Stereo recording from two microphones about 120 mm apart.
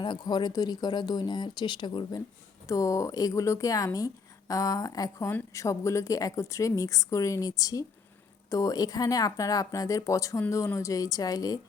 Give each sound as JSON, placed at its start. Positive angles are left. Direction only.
{"t": 0.0, "sound": "speech", "side_deg": 40}
{"t": 2.6, "sound": "a woman's voice", "side_deg": 25}